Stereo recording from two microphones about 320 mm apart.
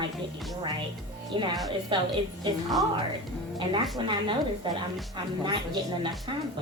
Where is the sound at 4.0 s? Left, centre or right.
Centre.